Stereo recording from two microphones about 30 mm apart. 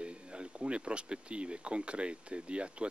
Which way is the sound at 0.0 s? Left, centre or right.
Right.